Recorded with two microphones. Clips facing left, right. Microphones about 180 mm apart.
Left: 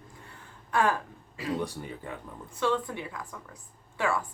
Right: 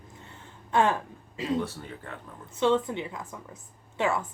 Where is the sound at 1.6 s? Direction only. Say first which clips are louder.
Left 1 dB; 15° left (ahead or behind).